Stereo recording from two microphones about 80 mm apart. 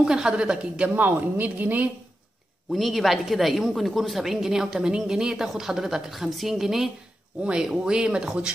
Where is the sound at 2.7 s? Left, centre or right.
Centre.